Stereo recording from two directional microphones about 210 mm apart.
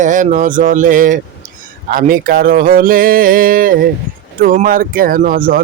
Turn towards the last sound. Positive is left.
turn(degrees=-40)  # may be behind; listen again after turning